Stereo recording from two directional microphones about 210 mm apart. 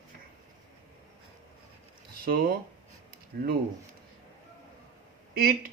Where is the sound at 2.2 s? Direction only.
45° right (ahead or behind).